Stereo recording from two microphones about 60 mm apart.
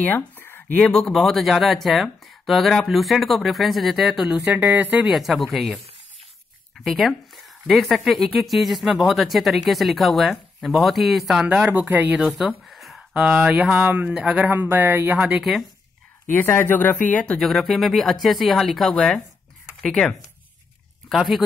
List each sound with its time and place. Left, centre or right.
0.0 s a sound: left
0.7 s a woman's voice: centre
4.6 s speech: right
5.0 s a woman's voice: centre
6.8 s a woman's voice: centre
11.4 s speech: right
11.9 s speech: right
12.2 s a woman's voice: centre
12.6 s a sound: centre
13.1 s speech: centre
14.1 s speech: centre
14.5 s speech: right
16.3 s speech: left
17.4 s a woman's voice: centre